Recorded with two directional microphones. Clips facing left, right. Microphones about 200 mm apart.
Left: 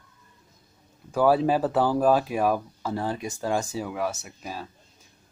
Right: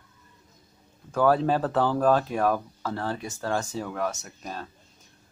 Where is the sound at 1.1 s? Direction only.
10° left (ahead or behind).